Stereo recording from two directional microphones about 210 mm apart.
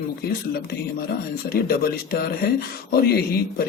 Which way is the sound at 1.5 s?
45° left (ahead or behind).